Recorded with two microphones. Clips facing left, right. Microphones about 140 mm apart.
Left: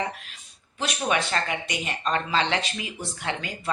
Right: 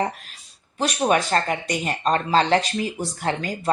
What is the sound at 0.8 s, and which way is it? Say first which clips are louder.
A woman's voice: right 6 dB; 40° right (ahead or behind).